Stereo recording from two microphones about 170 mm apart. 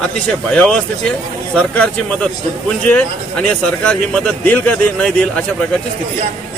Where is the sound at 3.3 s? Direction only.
5° left (ahead or behind).